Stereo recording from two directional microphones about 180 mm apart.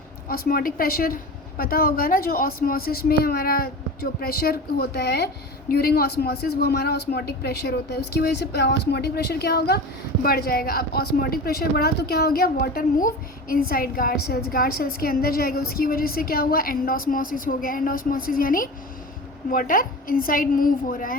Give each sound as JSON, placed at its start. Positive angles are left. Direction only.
{"t": 0.3, "sound": "a woman's voice", "side_deg": 55}